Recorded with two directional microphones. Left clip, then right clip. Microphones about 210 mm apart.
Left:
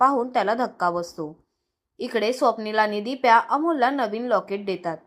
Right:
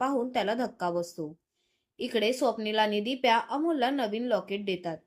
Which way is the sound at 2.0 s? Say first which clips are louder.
Left 5 dB; 20° right (ahead or behind).